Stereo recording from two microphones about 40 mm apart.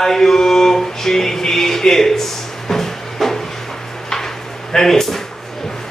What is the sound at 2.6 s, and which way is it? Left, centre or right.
Music, centre.